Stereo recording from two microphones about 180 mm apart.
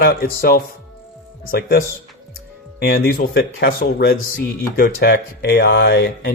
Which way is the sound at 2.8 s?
60° left (ahead or behind).